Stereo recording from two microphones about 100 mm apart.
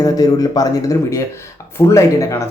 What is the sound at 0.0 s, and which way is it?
A man's voice, 40° left (ahead or behind).